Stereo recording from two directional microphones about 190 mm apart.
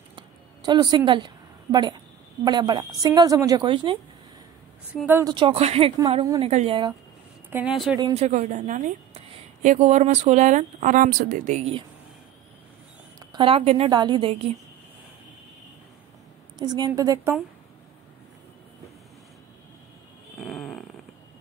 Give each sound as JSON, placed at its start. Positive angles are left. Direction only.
{"t": 0.1, "sound": "a sound", "side_deg": -25}
{"t": 2.4, "sound": "a woman's voice", "side_deg": -20}
{"t": 4.9, "sound": "a woman's voice", "side_deg": -10}
{"t": 5.3, "sound": "a woman's voice", "side_deg": -30}
{"t": 7.4, "sound": "speech", "side_deg": -5}
{"t": 8.0, "sound": "a woman's voice", "side_deg": -35}
{"t": 13.3, "sound": "a woman's voice", "side_deg": -25}
{"t": 16.5, "sound": "a woman's voice", "side_deg": -20}
{"t": 20.3, "sound": "a sound", "side_deg": 0}